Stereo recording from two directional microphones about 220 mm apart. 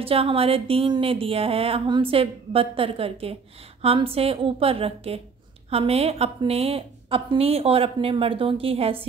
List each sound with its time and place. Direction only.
0.0 s speech: 25° right (ahead or behind)